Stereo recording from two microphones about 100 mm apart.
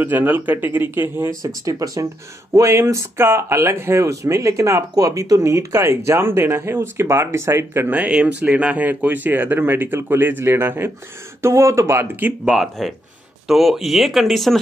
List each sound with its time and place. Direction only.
0.0 s speech: 20° right (ahead or behind)
1.4 s speech: 35° right (ahead or behind); by 12.5 s 15° right (ahead or behind)
12.5 s speech: centre (ahead or behind)